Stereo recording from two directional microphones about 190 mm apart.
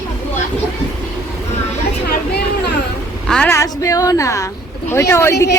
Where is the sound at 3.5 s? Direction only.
15° left (ahead or behind).